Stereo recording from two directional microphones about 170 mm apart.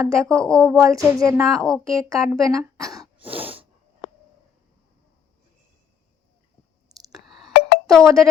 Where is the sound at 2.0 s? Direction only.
20° right (ahead or behind).